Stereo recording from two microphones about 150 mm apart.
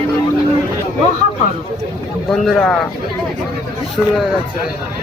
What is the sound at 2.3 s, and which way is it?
Speech, centre (ahead or behind).